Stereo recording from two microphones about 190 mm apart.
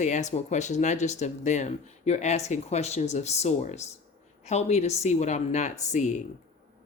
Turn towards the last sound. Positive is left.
turn(degrees=40)  # may be behind; listen again after turning